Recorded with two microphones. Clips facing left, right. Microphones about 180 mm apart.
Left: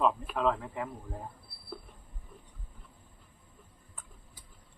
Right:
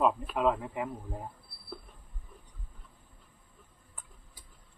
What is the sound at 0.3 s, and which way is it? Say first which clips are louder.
Speech: right 1 dB; 15° right (ahead or behind).